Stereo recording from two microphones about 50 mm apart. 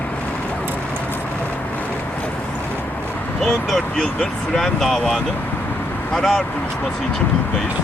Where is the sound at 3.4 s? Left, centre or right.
Centre.